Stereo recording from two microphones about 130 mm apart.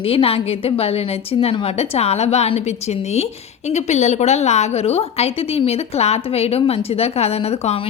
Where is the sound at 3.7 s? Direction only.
60° left (ahead or behind).